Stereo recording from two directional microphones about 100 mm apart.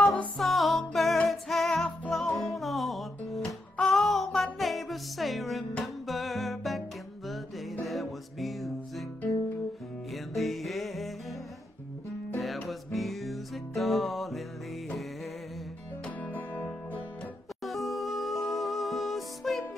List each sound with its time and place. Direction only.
0.0 s music: 15° left (ahead or behind)
0.4 s music: centre (ahead or behind)
10.1 s music: centre (ahead or behind)
12.4 s music: centre (ahead or behind)
16.3 s music: 15° left (ahead or behind)
17.6 s music: centre (ahead or behind)